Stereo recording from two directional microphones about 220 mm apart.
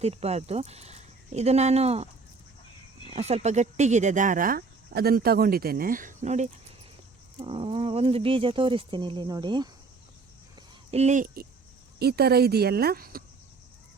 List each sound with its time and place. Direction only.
0.0 s speech: 30° right (ahead or behind)
3.1 s speech: 30° right (ahead or behind)
10.9 s speech: 30° right (ahead or behind)
11.9 s speech: 45° right (ahead or behind)